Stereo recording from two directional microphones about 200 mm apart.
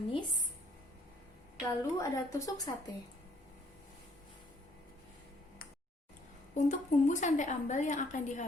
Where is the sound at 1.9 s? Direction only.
15° left (ahead or behind).